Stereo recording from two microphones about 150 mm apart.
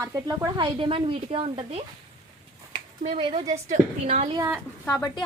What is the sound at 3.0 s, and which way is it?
A woman's voice, 50° right (ahead or behind).